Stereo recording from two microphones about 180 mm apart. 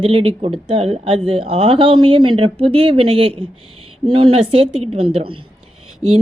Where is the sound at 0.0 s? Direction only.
30° right (ahead or behind).